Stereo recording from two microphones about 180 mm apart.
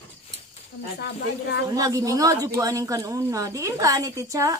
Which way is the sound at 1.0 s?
70° left (ahead or behind).